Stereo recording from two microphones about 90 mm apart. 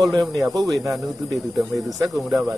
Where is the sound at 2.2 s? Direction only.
15° right (ahead or behind).